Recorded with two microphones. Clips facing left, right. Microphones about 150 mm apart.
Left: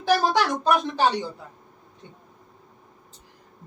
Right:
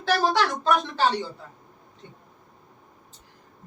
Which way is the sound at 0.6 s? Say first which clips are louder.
Left 1 dB; 15° left (ahead or behind).